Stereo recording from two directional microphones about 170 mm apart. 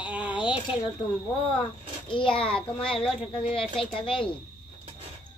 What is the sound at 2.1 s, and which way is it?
Speech, 30° left (ahead or behind).